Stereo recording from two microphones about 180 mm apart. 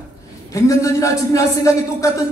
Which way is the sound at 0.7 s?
20° left (ahead or behind).